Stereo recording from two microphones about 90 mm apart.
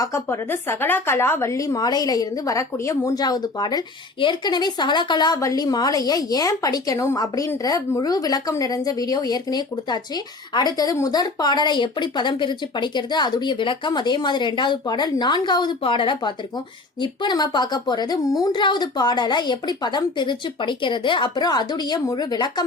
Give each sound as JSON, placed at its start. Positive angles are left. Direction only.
{"t": 0.0, "sound": "a woman's voice", "side_deg": 30}
{"t": 3.2, "sound": "a woman's voice", "side_deg": 45}
{"t": 4.2, "sound": "speech", "side_deg": 60}
{"t": 5.4, "sound": "a woman's voice", "side_deg": 40}
{"t": 15.8, "sound": "speech", "side_deg": 75}
{"t": 17.0, "sound": "a woman's voice", "side_deg": 60}